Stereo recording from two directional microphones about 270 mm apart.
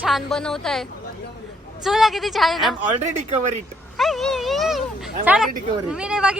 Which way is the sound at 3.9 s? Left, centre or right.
Centre.